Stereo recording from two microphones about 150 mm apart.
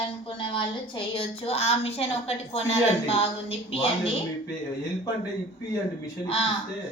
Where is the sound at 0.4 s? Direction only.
35° left (ahead or behind).